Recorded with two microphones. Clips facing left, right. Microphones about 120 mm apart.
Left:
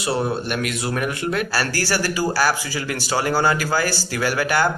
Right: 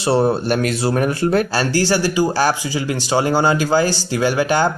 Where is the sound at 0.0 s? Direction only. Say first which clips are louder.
Right 6 dB; 30° right (ahead or behind).